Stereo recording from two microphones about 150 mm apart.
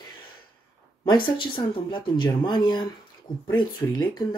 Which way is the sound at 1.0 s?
30° left (ahead or behind).